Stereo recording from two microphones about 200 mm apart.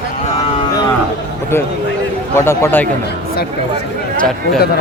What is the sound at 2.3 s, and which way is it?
Speech, 15° left (ahead or behind).